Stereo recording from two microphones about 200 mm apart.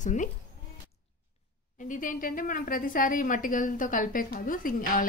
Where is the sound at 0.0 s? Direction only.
40° left (ahead or behind).